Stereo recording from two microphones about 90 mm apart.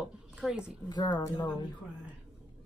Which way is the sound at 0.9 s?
50° left (ahead or behind).